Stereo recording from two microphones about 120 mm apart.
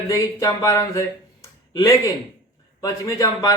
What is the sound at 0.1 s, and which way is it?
Speech, 25° left (ahead or behind).